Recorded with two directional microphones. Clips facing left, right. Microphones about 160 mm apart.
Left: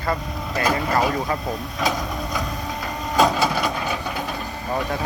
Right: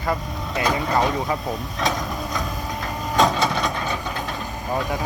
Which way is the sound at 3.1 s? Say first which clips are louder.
Left 1 dB; 5° left (ahead or behind).